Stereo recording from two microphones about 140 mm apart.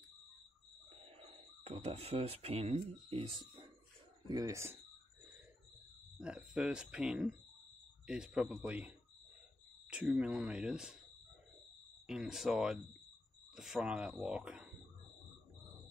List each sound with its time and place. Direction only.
1.6 s speech: 50° right (ahead or behind)
4.3 s speech: 25° right (ahead or behind)
6.1 s speech: 5° right (ahead or behind)
9.8 s speech: 5° right (ahead or behind)
12.1 s speech: 5° right (ahead or behind)